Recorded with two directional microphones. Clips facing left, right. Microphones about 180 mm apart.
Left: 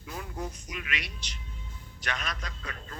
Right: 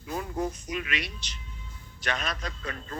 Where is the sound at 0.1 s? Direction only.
40° right (ahead or behind).